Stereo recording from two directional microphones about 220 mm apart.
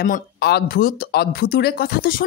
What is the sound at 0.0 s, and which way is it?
A woman's voice, 45° left (ahead or behind).